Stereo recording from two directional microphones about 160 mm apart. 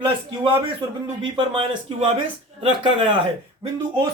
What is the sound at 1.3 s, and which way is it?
Speech, 35° right (ahead or behind).